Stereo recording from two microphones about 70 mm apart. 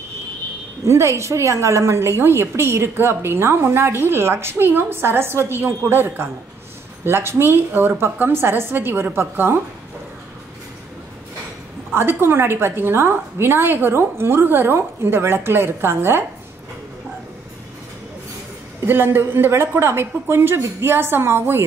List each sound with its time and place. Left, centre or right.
0.8 s a woman's voice: right
11.9 s a woman's voice: right
18.9 s a woman's voice: right